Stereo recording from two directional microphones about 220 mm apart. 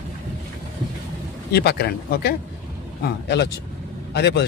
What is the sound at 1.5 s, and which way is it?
Speech, 45° left (ahead or behind).